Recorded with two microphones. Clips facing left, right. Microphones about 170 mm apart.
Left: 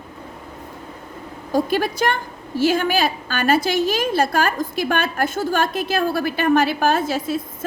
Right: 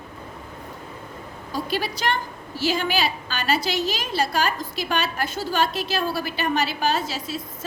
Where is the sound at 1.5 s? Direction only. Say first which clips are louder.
Left 7 dB; 50° left (ahead or behind).